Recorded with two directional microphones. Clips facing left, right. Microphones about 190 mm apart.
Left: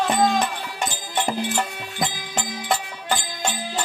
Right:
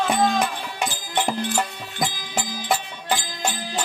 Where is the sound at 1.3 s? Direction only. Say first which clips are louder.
Left 2 dB; centre (ahead or behind).